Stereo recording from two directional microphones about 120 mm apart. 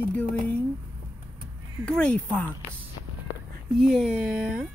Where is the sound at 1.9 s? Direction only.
10° left (ahead or behind).